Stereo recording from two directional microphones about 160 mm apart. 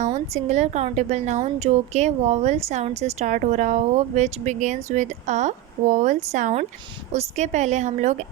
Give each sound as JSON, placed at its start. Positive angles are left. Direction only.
{"t": 0.0, "sound": "speech", "side_deg": -45}